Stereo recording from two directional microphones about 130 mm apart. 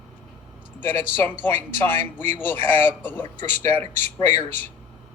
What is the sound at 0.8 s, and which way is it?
A man's voice, 15° left (ahead or behind).